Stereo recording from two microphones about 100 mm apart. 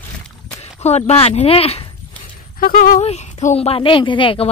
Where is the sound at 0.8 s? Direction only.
85° left.